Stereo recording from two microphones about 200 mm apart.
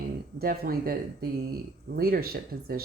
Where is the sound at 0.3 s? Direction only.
50° right (ahead or behind).